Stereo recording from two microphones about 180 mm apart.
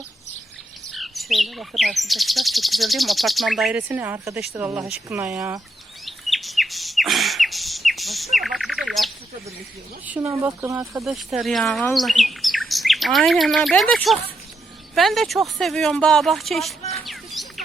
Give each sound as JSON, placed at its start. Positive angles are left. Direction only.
{"t": 0.9, "sound": "bird", "side_deg": 0}
{"t": 4.5, "sound": "speech", "side_deg": -10}
{"t": 6.1, "sound": "chirp", "side_deg": 0}
{"t": 10.1, "sound": "speech", "side_deg": -10}
{"t": 11.0, "sound": "speech", "side_deg": 0}
{"t": 11.9, "sound": "bird", "side_deg": 0}
{"t": 14.9, "sound": "speech", "side_deg": 0}
{"t": 16.9, "sound": "rodents", "side_deg": 0}